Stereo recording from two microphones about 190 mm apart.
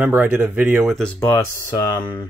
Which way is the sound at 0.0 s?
5° right (ahead or behind).